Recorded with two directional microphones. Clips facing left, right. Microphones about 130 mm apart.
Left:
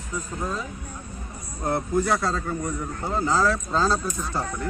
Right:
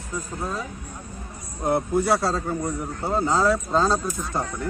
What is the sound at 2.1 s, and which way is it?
A man's voice, 35° right (ahead or behind).